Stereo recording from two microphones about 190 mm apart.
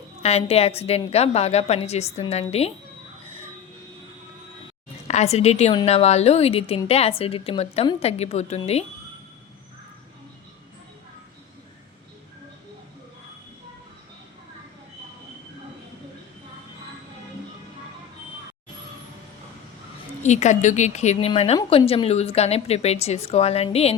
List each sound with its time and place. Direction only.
0.2 s a woman's voice: 35° left (ahead or behind)
5.0 s a woman's voice: 35° left (ahead or behind)
20.2 s a woman's voice: 35° left (ahead or behind)